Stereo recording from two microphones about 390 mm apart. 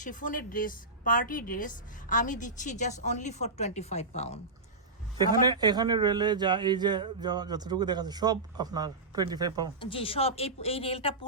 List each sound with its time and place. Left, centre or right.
0.0 s a woman's voice: centre
5.5 s speech: centre
9.8 s speech: centre